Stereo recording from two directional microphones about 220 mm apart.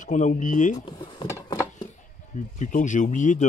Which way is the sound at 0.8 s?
20° left (ahead or behind).